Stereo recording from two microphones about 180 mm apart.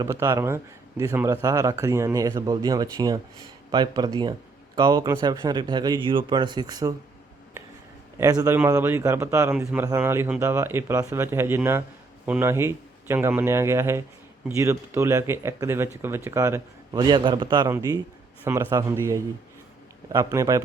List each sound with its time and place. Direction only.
0.0 s speech: 15° right (ahead or behind)
8.2 s speech: 20° right (ahead or behind)